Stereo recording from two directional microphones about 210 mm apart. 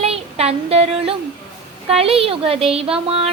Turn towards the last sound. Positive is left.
turn(degrees=-25)  # may be behind; listen again after turning